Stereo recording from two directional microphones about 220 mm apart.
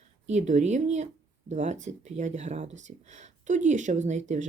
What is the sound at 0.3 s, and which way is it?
Speech, 30° right (ahead or behind).